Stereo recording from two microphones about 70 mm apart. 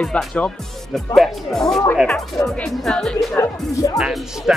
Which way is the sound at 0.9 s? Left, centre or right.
Centre.